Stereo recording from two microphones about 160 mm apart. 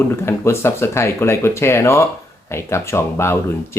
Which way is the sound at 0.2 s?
15° left (ahead or behind).